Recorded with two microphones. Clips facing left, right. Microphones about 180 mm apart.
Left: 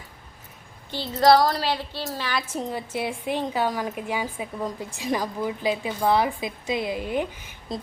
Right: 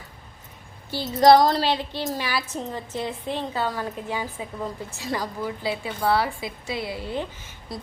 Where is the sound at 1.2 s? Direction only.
20° right (ahead or behind).